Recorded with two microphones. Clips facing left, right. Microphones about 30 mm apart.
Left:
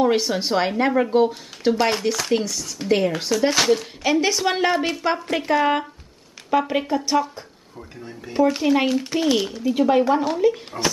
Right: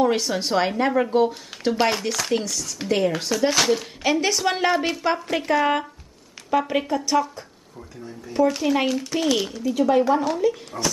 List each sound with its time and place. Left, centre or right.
0.0 s speech: centre
9.6 s speech: left